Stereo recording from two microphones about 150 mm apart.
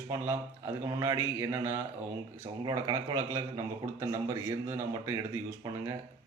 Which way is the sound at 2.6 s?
25° right (ahead or behind).